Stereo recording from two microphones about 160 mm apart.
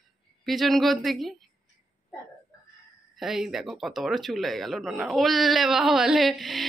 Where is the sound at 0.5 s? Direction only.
Centre (ahead or behind).